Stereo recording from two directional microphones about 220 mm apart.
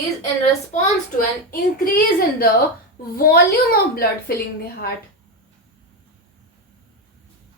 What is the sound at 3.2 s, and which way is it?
Speech, 45° left (ahead or behind).